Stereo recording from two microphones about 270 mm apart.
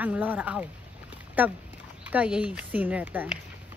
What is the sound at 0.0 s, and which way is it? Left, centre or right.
Speech, centre.